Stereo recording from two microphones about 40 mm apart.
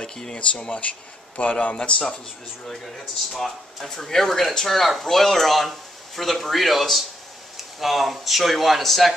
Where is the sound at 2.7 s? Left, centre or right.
Centre.